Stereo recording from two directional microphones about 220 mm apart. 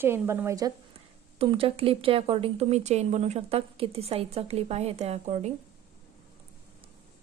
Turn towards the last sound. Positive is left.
turn(degrees=-30)  # may be behind; listen again after turning